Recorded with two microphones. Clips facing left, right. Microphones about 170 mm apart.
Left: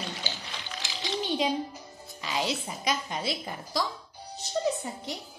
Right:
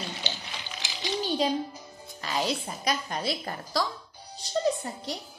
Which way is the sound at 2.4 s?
20° left (ahead or behind).